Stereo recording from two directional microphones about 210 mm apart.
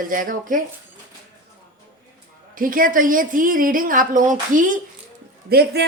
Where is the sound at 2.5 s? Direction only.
40° right (ahead or behind).